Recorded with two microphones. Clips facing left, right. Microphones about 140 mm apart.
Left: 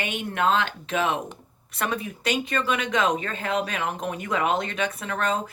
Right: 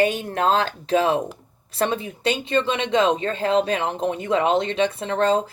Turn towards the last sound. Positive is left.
turn(degrees=-30)  # may be behind; listen again after turning